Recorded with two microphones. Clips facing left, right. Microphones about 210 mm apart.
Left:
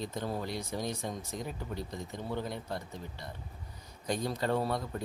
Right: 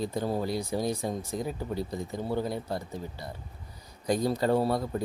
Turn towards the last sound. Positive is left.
turn(degrees=-35)  # may be behind; listen again after turning